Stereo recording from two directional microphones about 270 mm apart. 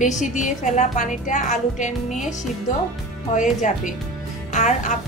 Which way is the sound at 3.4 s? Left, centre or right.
Left.